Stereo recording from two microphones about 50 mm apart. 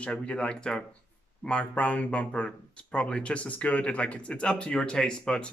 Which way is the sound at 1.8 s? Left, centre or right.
Left.